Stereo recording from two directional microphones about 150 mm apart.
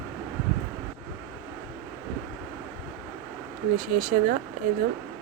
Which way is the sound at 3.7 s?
65° right (ahead or behind).